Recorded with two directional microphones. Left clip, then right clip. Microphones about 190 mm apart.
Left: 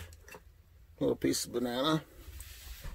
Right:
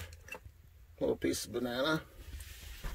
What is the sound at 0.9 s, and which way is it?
Speech, 25° left (ahead or behind).